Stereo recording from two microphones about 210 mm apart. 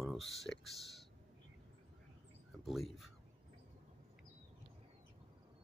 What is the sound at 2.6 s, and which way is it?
Speech, centre (ahead or behind).